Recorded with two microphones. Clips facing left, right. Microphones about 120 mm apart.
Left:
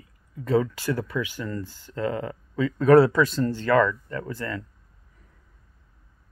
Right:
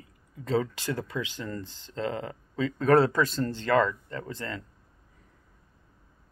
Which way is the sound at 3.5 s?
25° right (ahead or behind).